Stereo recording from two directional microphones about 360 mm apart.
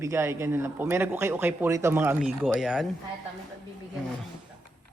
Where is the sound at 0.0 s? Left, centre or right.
Centre.